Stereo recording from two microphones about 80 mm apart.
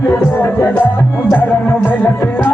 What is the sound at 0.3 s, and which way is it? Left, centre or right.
Music, left.